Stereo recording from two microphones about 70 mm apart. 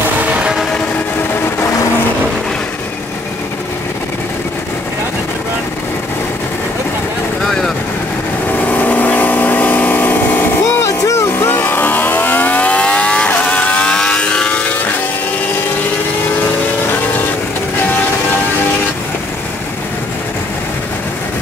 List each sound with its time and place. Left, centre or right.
7.4 s vehicle: centre
8.5 s vehicle: left
10.9 s vehicle: left
11.3 s vehicle: left; by 14.6 s centre